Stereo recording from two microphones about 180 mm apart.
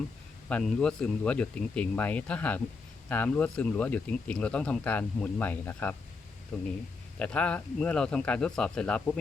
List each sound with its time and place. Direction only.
0.4 s speech: 5° left (ahead or behind)